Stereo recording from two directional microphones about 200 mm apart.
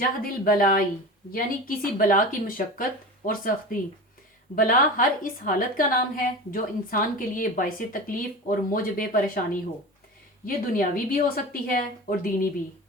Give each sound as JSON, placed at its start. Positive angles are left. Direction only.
{"t": 0.2, "sound": "a woman's voice", "side_deg": 45}
{"t": 10.4, "sound": "a woman's voice", "side_deg": 45}